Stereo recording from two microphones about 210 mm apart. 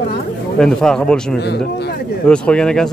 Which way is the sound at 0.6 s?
5° left (ahead or behind).